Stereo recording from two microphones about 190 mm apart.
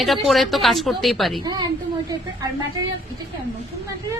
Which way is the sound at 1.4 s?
20° right (ahead or behind).